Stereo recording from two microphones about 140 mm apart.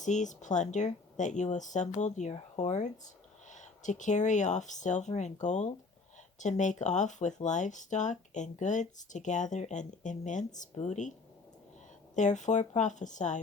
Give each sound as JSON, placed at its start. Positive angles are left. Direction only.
{"t": 0.0, "sound": "speech", "side_deg": 60}
{"t": 12.1, "sound": "speech", "side_deg": 60}